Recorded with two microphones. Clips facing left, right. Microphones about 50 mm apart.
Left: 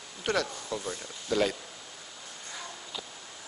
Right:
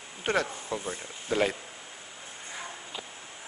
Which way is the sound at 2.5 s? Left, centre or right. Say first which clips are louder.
Right 1 dB; right.